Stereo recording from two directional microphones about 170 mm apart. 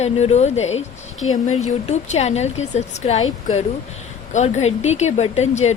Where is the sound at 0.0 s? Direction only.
40° left (ahead or behind).